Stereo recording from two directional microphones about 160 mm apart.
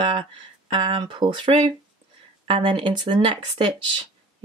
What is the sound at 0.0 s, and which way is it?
Speech, 30° right (ahead or behind).